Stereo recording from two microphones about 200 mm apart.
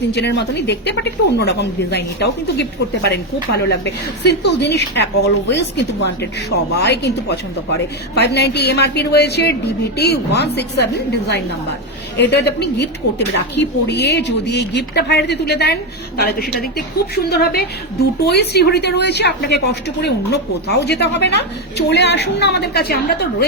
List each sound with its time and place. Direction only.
0.1 s a woman's voice: 55° left (ahead or behind)
12.3 s a woman's voice: 55° left (ahead or behind)